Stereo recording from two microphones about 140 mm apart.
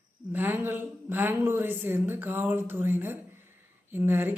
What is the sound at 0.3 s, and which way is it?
A woman's voice, 15° right (ahead or behind).